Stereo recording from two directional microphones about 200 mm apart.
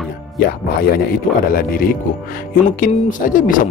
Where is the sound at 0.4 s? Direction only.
50° left (ahead or behind).